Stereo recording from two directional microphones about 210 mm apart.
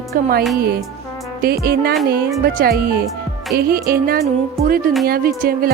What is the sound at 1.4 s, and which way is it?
Music, 45° right (ahead or behind).